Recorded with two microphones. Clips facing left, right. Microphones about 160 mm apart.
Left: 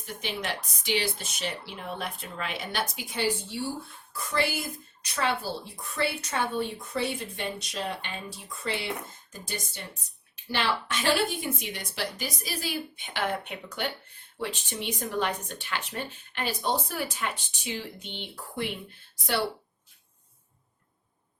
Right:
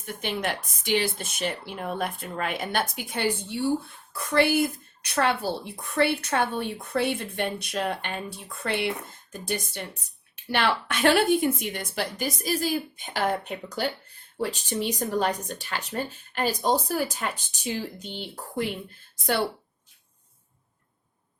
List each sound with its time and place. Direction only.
0.0 s a woman's voice: 55° right (ahead or behind)
10.5 s a woman's voice: 60° right (ahead or behind); by 18.6 s 40° right (ahead or behind)
19.2 s a woman's voice: 50° right (ahead or behind)